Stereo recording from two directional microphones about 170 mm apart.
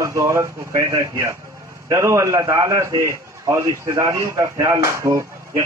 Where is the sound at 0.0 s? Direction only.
15° right (ahead or behind).